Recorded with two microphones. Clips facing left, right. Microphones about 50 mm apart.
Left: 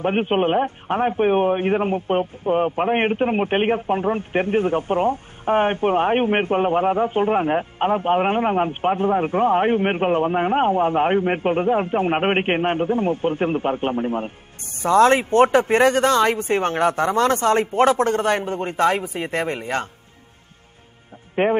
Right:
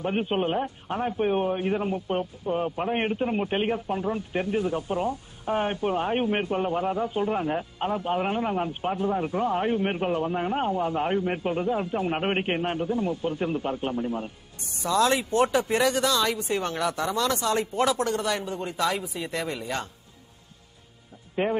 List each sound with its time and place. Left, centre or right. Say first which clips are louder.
0.0 s a man's voice: left 7 dB; left
21.4 s a man's voice: left 7 dB; left